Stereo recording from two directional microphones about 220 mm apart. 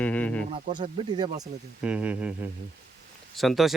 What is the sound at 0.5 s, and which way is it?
Speech, 20° right (ahead or behind).